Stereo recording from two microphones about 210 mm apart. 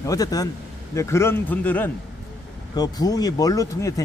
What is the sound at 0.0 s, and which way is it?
Speech, 15° left (ahead or behind).